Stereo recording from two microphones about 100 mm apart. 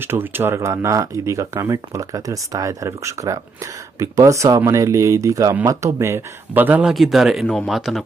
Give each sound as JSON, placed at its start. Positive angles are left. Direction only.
{"t": 0.0, "sound": "speech", "side_deg": -20}
{"t": 6.8, "sound": "a man's voice", "side_deg": 0}
{"t": 7.4, "sound": "speech", "side_deg": 10}
{"t": 7.7, "sound": "a man's voice", "side_deg": -5}